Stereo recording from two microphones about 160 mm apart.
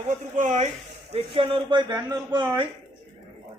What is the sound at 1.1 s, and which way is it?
Speech, 35° right (ahead or behind).